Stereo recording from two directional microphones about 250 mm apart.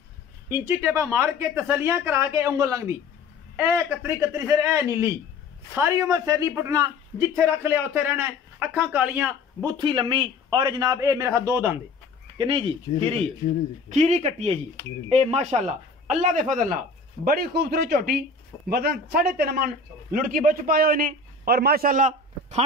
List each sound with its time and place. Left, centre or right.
0.5 s a man's voice: centre
9.7 s a man's voice: centre